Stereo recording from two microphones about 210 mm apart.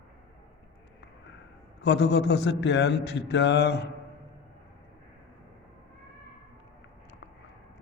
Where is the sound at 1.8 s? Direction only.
55° left (ahead or behind).